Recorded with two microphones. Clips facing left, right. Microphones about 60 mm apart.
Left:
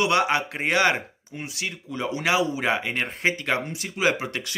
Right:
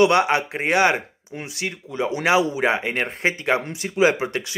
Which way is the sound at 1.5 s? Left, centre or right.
Right.